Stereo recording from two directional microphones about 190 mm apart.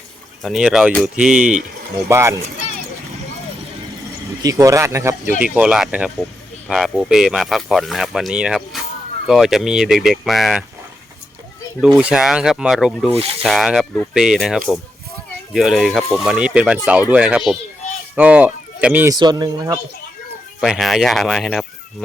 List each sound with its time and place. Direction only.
0.4 s speech: centre (ahead or behind)
4.4 s speech: 15° right (ahead or behind); by 10.6 s centre (ahead or behind)
11.8 s speech: 5° right (ahead or behind)
19.1 s speech: 20° right (ahead or behind)
20.6 s speech: centre (ahead or behind)